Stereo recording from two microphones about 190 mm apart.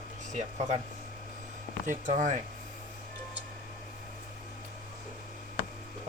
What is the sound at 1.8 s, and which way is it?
Speech, 40° right (ahead or behind).